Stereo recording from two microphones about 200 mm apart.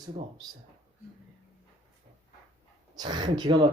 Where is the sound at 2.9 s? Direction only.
20° right (ahead or behind).